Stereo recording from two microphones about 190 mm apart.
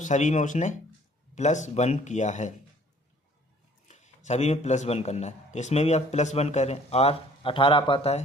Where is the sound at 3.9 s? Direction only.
35° left (ahead or behind).